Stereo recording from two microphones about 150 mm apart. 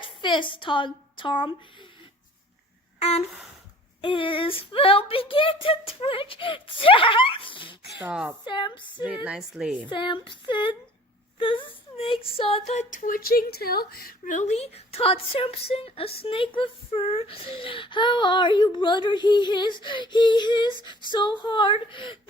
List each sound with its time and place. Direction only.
0.0 s a woman's voice: 30° left (ahead or behind)
3.0 s a sound: 45° left (ahead or behind)
4.0 s speech: 35° left (ahead or behind)
8.0 s a woman's voice: 10° right (ahead or behind)
8.4 s speech: 30° left (ahead or behind)
9.2 s a woman's voice: 5° right (ahead or behind)
9.9 s speech: 35° left (ahead or behind)
13.0 s speech: 70° left (ahead or behind); by 22.2 s 35° left (ahead or behind)